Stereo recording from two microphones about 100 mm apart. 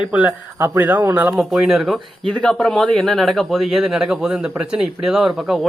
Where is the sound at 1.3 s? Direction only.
5° right (ahead or behind).